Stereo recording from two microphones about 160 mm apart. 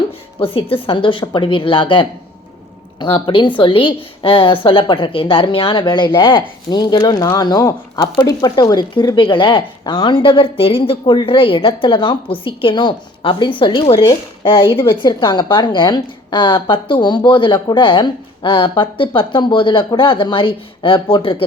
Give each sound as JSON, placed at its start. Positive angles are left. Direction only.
{"t": 0.3, "sound": "a woman's voice", "side_deg": 35}